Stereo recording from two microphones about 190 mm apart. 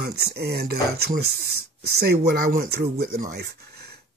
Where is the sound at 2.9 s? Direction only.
55° right (ahead or behind).